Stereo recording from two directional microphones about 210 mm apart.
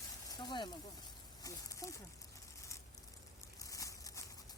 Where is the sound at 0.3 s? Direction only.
20° left (ahead or behind).